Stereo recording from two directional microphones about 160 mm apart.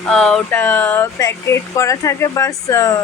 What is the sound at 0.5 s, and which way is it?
Speech, 10° left (ahead or behind).